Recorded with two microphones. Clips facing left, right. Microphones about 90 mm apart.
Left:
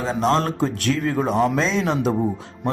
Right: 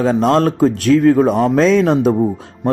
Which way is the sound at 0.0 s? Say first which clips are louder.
Right 7 dB; 50° right (ahead or behind).